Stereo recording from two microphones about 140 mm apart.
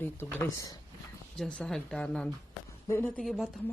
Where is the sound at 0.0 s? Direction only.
15° left (ahead or behind).